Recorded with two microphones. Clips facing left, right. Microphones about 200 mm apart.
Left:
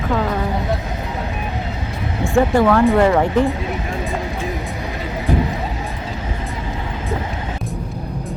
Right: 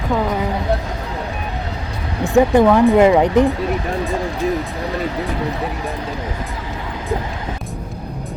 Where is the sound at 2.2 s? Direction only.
20° right (ahead or behind).